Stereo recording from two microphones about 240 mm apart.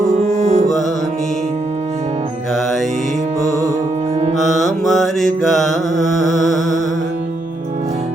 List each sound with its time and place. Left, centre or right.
0.2 s music: right
4.4 s mantra: centre